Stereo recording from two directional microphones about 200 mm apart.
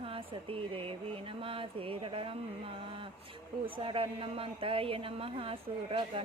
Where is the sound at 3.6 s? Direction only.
25° right (ahead or behind).